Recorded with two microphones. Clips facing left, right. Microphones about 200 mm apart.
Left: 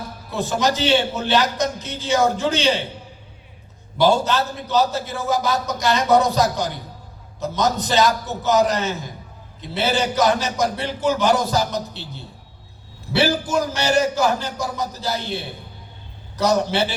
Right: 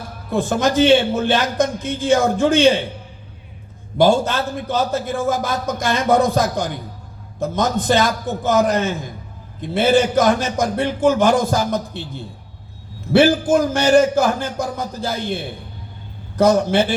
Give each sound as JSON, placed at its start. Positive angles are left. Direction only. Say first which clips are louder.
{"t": 0.3, "sound": "a man's voice", "louder": "right 3 dB", "side_deg": -50}
{"t": 3.9, "sound": "a man's voice", "louder": "right 2 dB", "side_deg": -50}
{"t": 16.4, "sound": "a man's voice", "louder": "right 5 dB", "side_deg": -50}